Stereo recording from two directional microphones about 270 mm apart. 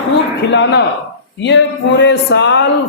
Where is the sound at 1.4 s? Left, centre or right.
Left.